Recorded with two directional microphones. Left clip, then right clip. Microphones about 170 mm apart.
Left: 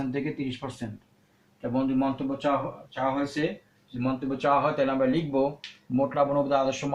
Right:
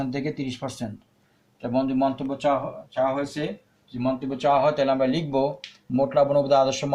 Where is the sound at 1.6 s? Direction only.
50° right (ahead or behind).